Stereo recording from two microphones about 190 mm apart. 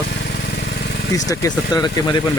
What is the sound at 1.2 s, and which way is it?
Speech, 20° left (ahead or behind).